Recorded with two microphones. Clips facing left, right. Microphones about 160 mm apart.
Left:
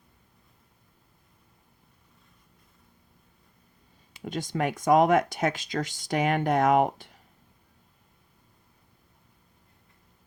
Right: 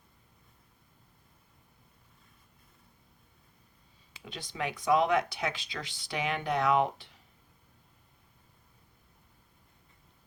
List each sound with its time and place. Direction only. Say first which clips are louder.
4.2 s speech: left 8 dB; 45° left (ahead or behind)